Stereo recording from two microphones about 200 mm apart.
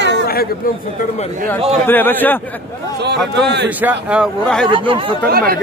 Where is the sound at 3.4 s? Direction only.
55° right (ahead or behind).